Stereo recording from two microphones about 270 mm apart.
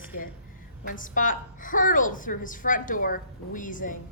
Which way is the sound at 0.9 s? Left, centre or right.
Left.